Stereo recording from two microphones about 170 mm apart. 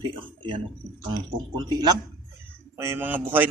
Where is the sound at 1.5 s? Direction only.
25° right (ahead or behind).